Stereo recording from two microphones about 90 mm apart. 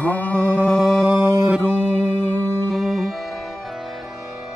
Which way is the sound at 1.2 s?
15° right (ahead or behind).